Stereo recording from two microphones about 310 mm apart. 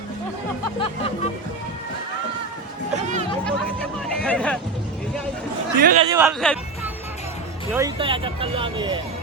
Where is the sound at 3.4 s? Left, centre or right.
Centre.